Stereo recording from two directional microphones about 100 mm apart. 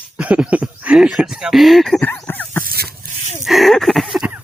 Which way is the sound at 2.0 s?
20° left (ahead or behind).